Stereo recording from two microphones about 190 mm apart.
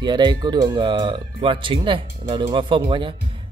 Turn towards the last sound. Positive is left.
turn(degrees=-25)  # may be behind; listen again after turning